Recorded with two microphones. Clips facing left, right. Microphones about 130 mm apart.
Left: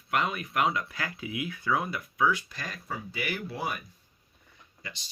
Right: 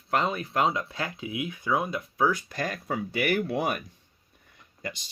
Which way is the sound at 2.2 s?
40° right (ahead or behind).